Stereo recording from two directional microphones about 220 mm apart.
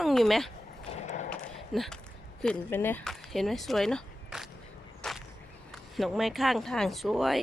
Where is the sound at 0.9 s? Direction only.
30° left (ahead or behind).